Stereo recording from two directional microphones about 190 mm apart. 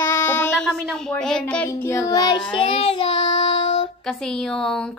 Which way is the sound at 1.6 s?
15° left (ahead or behind).